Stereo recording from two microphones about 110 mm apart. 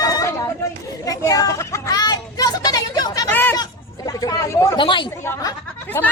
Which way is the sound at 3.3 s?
20° left (ahead or behind).